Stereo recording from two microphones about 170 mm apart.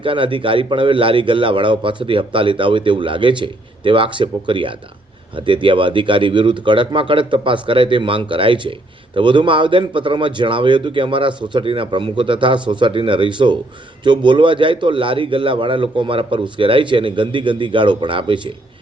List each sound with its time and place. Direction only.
0.0 s a man's voice: 30° right (ahead or behind)